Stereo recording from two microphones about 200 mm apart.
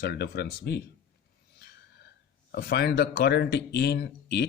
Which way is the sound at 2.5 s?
50° left (ahead or behind).